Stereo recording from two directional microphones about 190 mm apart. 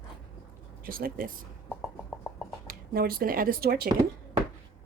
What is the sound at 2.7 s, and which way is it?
Speech, 50° right (ahead or behind).